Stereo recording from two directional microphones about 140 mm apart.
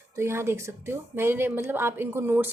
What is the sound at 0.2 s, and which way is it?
Speech, 20° right (ahead or behind).